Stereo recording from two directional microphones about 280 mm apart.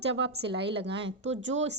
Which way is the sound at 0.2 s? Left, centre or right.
Right.